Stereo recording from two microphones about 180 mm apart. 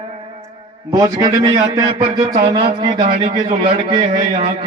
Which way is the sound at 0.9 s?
20° right (ahead or behind).